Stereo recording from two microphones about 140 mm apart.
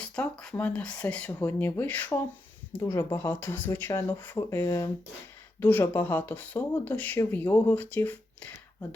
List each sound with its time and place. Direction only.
0.0 s speech: 10° left (ahead or behind)
2.8 s speech: 20° left (ahead or behind)